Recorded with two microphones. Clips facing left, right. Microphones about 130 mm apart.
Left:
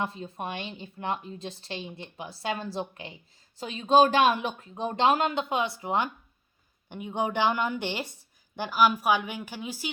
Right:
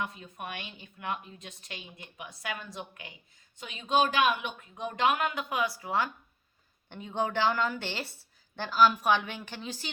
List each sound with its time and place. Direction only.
0.0 s a woman's voice: 30° left (ahead or behind); by 9.9 s 10° left (ahead or behind)